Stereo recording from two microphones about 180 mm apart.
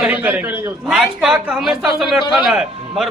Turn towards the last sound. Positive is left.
turn(degrees=0)  # may be behind; listen again after turning